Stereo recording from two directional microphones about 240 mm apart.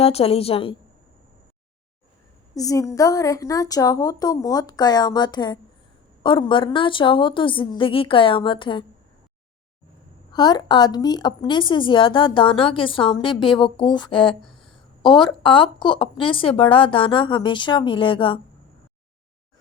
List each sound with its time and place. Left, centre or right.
0.0 s a woman's voice: left
2.6 s a woman's voice: centre
10.3 s a woman's voice: centre